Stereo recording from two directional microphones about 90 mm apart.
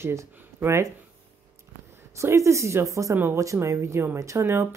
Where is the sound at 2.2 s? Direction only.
35° right (ahead or behind).